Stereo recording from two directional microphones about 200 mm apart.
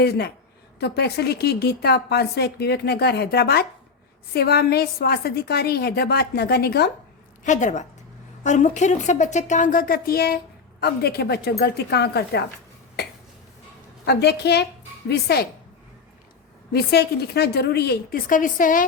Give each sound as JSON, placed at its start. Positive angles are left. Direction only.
{"t": 0.0, "sound": "a woman's voice", "side_deg": 55}
{"t": 7.4, "sound": "a woman's voice", "side_deg": 35}
{"t": 13.0, "sound": "cough", "side_deg": 55}
{"t": 14.0, "sound": "a woman's voice", "side_deg": 55}
{"t": 16.7, "sound": "speech", "side_deg": 55}